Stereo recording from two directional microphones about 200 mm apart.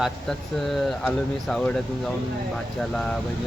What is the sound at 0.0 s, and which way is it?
Speech, centre (ahead or behind).